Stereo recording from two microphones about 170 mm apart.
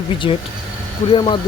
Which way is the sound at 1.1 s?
30° left (ahead or behind).